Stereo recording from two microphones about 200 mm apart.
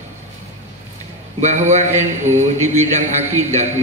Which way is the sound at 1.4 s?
35° right (ahead or behind).